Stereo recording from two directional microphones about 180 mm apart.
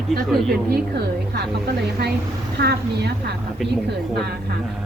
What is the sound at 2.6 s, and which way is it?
Speech, 70° right (ahead or behind).